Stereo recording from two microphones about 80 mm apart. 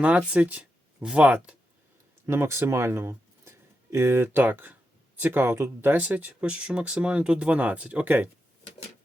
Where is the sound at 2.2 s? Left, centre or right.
Right.